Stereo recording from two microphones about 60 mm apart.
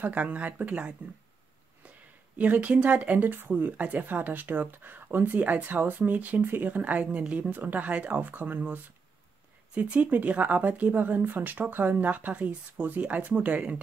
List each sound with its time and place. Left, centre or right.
0.0 s speech: right
2.3 s speech: right